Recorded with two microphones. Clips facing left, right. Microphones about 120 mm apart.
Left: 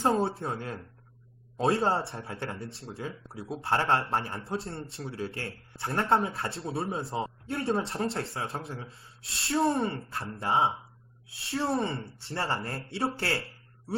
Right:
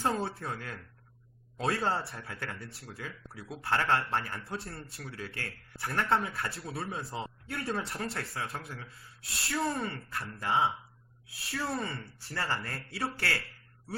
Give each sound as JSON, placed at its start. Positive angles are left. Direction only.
{"t": 0.0, "sound": "a man's voice", "side_deg": 30}